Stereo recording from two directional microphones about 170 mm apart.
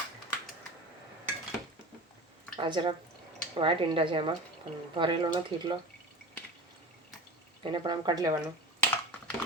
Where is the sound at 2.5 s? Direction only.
30° right (ahead or behind).